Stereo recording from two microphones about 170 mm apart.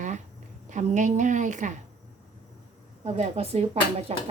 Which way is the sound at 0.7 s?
45° right (ahead or behind).